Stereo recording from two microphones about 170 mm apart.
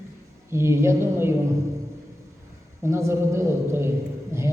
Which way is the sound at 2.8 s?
15° right (ahead or behind).